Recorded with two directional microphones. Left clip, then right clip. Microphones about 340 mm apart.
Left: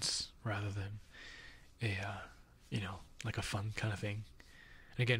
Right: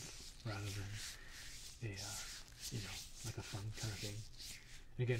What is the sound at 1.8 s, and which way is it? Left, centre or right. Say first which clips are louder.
Speech: left 10 dB; left.